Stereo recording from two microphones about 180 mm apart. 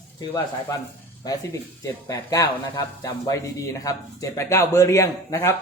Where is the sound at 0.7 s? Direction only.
20° left (ahead or behind).